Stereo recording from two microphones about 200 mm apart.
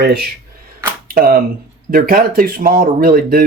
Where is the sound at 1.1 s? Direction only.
45° right (ahead or behind).